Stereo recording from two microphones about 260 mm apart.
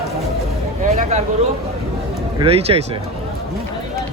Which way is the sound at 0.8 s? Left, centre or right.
Right.